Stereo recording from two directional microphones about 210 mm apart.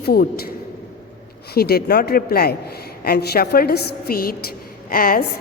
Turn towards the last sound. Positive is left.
turn(degrees=45)  # may be behind; listen again after turning